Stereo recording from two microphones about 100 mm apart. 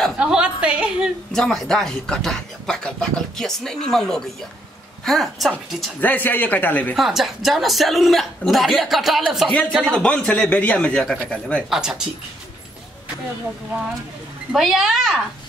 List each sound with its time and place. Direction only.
0.2 s a woman's voice: 10° right (ahead or behind)
1.3 s speech: 5° left (ahead or behind)
5.9 s speech: 15° left (ahead or behind)
7.0 s speech: 5° right (ahead or behind)
9.5 s speech: 15° left (ahead or behind)
11.7 s speech: 5° right (ahead or behind)
14.5 s speech: centre (ahead or behind)